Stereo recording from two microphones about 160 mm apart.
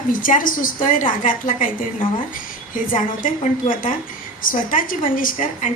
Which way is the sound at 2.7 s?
55° left (ahead or behind).